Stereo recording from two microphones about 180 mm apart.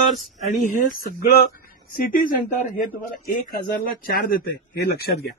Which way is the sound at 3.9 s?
55° left (ahead or behind).